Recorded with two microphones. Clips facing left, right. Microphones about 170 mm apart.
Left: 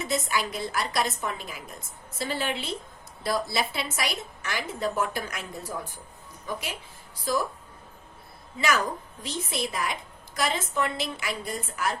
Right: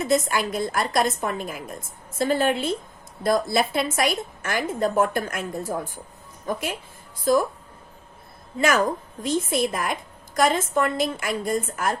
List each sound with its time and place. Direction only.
0.0 s a woman's voice: 50° right (ahead or behind)
8.5 s a woman's voice: 50° right (ahead or behind)